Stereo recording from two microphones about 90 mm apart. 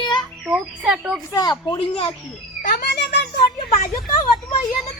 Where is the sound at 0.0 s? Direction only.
55° left (ahead or behind).